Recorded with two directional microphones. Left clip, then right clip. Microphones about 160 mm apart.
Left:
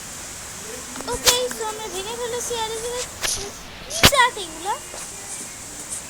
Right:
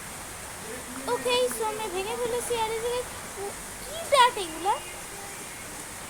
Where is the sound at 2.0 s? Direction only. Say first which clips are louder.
Left 2 dB; 5° right (ahead or behind).